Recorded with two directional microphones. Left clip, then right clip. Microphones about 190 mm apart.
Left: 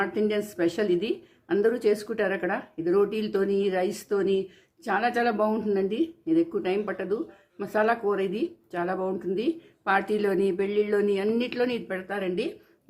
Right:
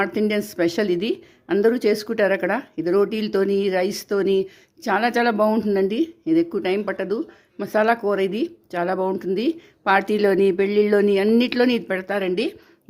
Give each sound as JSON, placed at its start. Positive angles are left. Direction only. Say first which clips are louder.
{"t": 0.0, "sound": "speech", "louder": "right 4 dB", "side_deg": -45}